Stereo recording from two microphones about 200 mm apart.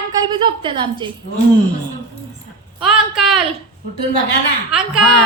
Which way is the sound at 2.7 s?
Centre (ahead or behind).